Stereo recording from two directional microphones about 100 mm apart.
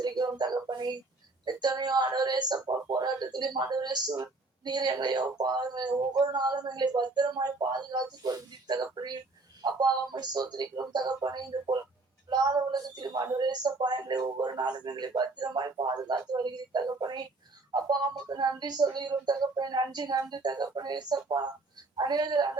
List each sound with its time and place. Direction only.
0.0 s speech: 45° right (ahead or behind)